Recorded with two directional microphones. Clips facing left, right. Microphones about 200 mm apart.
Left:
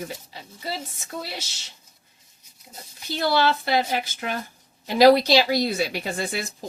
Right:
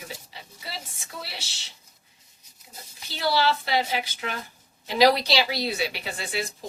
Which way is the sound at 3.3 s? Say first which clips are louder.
Left 2 dB; 50° left (ahead or behind).